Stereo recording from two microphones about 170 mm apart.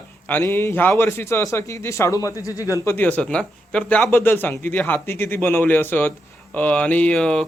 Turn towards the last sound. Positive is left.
turn(degrees=5)  # may be behind; listen again after turning